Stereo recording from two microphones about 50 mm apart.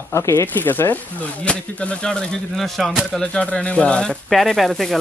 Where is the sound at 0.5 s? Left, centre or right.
Left.